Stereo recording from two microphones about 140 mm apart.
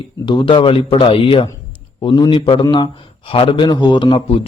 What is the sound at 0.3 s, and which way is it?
A man's voice, 35° left (ahead or behind).